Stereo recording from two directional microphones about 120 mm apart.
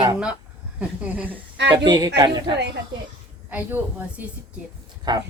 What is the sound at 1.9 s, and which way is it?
Speech, 35° right (ahead or behind).